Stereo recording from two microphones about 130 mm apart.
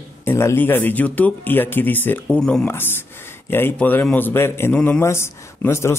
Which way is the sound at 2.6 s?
15° left (ahead or behind).